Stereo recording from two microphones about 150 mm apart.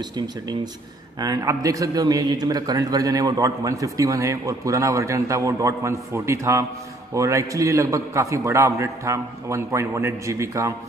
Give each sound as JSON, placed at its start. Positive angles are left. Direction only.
{"t": 1.2, "sound": "a man's voice", "side_deg": -20}